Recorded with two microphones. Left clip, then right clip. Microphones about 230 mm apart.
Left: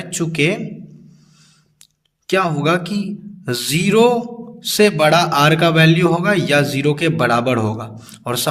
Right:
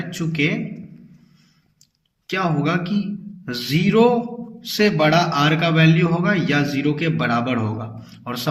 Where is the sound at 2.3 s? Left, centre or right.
Left.